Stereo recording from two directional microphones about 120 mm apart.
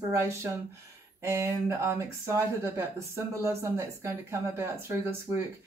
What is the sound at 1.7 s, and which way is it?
Speech, 25° right (ahead or behind).